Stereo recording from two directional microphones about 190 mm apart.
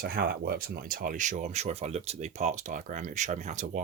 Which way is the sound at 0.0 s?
55° right (ahead or behind).